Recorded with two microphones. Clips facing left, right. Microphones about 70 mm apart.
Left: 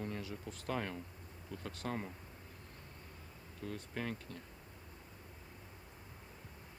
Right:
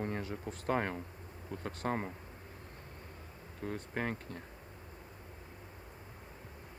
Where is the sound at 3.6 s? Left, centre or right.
Right.